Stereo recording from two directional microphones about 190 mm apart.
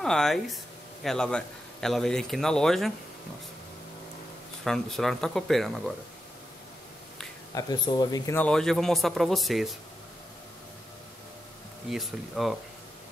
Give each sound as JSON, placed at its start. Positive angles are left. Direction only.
{"t": 0.0, "sound": "a man's voice", "side_deg": 5}
{"t": 4.6, "sound": "a man's voice", "side_deg": 0}
{"t": 7.5, "sound": "speech", "side_deg": 20}
{"t": 8.4, "sound": "a man's voice", "side_deg": 5}
{"t": 11.9, "sound": "a man's voice", "side_deg": 0}